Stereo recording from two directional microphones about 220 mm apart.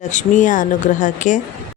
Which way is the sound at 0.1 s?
35° left (ahead or behind).